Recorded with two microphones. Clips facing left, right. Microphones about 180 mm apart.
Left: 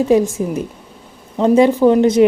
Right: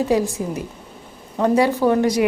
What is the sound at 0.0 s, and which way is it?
Speech, 20° left (ahead or behind).